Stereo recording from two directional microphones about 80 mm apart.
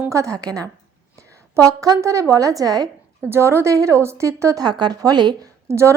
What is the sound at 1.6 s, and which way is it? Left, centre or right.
A woman's voice, right.